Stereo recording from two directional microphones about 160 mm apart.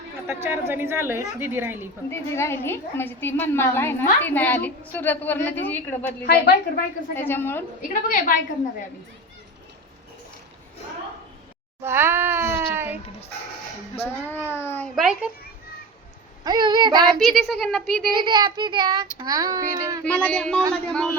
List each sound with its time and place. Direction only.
0.3 s a woman's voice: 15° right (ahead or behind)
2.0 s a woman's voice: 15° left (ahead or behind)
6.2 s a woman's voice: 75° left (ahead or behind)
7.2 s a woman's voice: 15° left (ahead or behind)
8.0 s a woman's voice: 60° left (ahead or behind)
11.8 s a child's voice: 15° right (ahead or behind)
14.0 s speech: 10° left (ahead or behind)
14.9 s speech: 5° right (ahead or behind)
16.4 s child singing: 25° right (ahead or behind)
17.2 s speech: centre (ahead or behind)
18.1 s child singing: 30° right (ahead or behind)
20.1 s a woman's voice: 10° left (ahead or behind)